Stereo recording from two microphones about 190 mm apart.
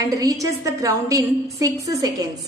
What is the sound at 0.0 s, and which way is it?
A woman's voice, 20° right (ahead or behind).